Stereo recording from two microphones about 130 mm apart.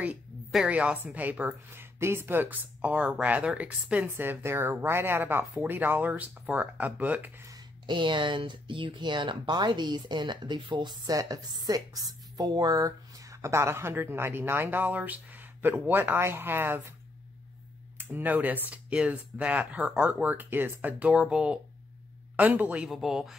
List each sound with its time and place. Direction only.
0.0 s a woman's voice: 5° right (ahead or behind)
7.4 s speech: 30° right (ahead or behind); by 16.8 s 15° right (ahead or behind)
17.9 s a woman's voice: 15° right (ahead or behind)